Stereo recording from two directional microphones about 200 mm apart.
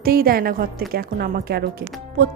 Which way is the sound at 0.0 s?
50° right (ahead or behind).